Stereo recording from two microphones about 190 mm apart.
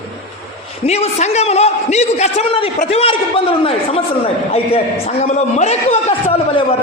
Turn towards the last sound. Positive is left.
turn(degrees=35)  # may be behind; listen again after turning